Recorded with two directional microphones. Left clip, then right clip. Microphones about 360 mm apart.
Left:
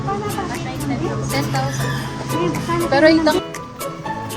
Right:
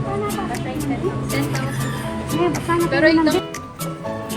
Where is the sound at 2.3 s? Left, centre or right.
Centre.